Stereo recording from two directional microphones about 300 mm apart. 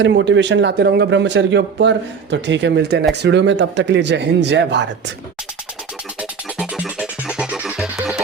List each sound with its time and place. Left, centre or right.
0.0 s a man's voice: right
6.1 s music: centre